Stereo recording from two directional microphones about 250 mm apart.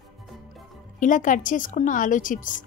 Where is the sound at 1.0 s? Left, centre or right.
Left.